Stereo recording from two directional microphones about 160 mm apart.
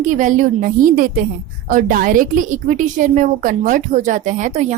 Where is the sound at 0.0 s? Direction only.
50° right (ahead or behind).